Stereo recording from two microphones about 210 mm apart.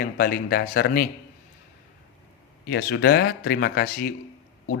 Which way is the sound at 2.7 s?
55° left (ahead or behind).